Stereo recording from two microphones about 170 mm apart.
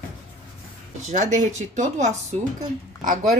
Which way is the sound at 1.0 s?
45° right (ahead or behind).